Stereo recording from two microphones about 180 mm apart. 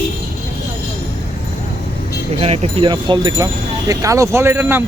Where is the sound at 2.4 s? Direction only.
30° right (ahead or behind).